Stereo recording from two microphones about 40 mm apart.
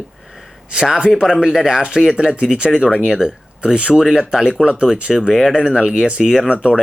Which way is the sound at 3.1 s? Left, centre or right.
Centre.